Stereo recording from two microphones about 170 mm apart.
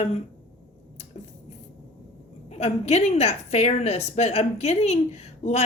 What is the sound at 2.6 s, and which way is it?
A woman's voice, 40° left (ahead or behind).